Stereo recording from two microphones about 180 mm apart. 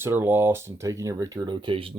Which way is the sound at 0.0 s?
15° right (ahead or behind).